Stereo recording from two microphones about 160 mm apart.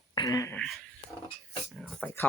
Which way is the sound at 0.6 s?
5° left (ahead or behind).